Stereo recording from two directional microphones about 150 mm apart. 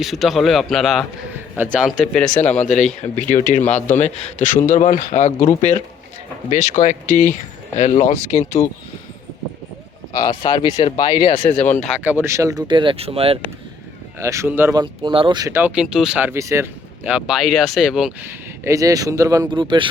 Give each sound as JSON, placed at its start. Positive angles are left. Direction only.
{"t": 0.0, "sound": "a man's voice", "side_deg": 0}
{"t": 1.5, "sound": "speech", "side_deg": -10}
{"t": 2.4, "sound": "speech", "side_deg": 10}
{"t": 2.7, "sound": "a man's voice", "side_deg": 50}
{"t": 10.1, "sound": "speech", "side_deg": 25}
{"t": 11.3, "sound": "speech", "side_deg": 50}
{"t": 12.0, "sound": "speech", "side_deg": -15}
{"t": 14.2, "sound": "speech", "side_deg": -20}
{"t": 14.8, "sound": "speech", "side_deg": -35}
{"t": 15.4, "sound": "speech", "side_deg": -15}